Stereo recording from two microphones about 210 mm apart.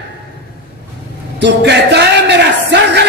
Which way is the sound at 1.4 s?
55° right (ahead or behind).